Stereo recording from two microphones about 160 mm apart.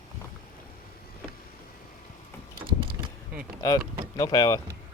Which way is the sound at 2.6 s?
35° right (ahead or behind).